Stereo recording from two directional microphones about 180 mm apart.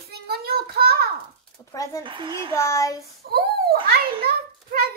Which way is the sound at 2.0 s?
25° right (ahead or behind).